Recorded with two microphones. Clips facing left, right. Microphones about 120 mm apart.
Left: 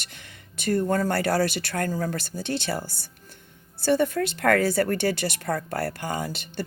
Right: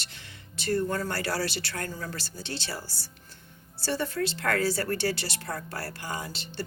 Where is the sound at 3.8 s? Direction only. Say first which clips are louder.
Left 7 dB; 55° left (ahead or behind).